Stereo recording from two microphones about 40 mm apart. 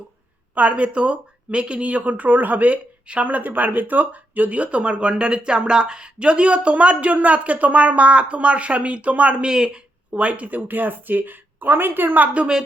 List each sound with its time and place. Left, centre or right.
0.5 s speech: right
9.5 s speech: right
10.1 s speech: right